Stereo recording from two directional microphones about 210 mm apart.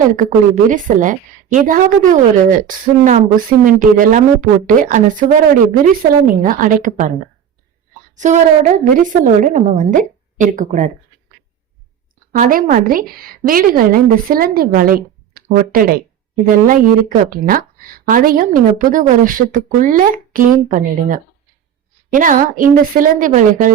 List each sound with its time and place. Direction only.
0.2 s a woman's voice: 35° right (ahead or behind)
8.1 s a woman's voice: 35° right (ahead or behind)
12.3 s a woman's voice: 40° right (ahead or behind)